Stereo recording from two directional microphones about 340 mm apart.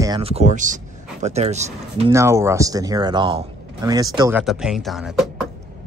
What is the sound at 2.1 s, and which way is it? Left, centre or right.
Speech, centre.